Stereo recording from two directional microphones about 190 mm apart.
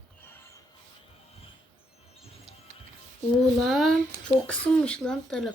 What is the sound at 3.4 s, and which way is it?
A woman's voice, centre (ahead or behind).